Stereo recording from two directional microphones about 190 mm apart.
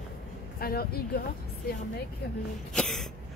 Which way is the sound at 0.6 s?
55° left (ahead or behind).